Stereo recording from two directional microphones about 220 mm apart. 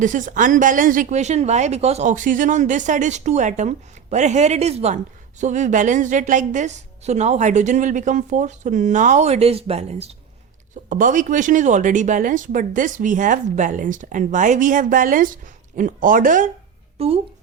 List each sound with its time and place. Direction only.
0.0 s speech: 35° right (ahead or behind)
17.0 s speech: 25° right (ahead or behind)